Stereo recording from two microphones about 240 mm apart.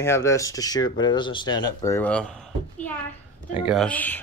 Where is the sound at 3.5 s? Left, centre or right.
Centre.